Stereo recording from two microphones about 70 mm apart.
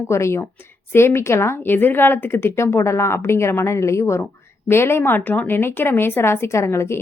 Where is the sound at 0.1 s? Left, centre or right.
Left.